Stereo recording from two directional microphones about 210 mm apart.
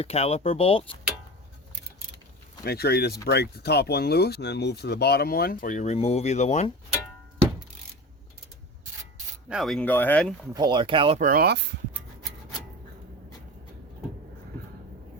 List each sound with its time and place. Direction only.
0.0 s speech: 30° left (ahead or behind)
2.6 s speech: 50° left (ahead or behind); by 6.7 s 30° left (ahead or behind)
9.5 s speech: centre (ahead or behind)
10.5 s speech: 20° right (ahead or behind)
11.2 s speech: 45° right (ahead or behind)